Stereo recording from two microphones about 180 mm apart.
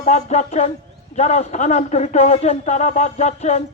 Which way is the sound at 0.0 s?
40° left (ahead or behind).